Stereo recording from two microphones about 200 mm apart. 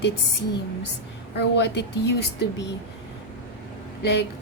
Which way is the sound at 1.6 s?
60° left (ahead or behind).